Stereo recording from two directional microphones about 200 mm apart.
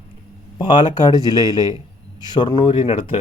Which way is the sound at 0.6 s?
25° left (ahead or behind).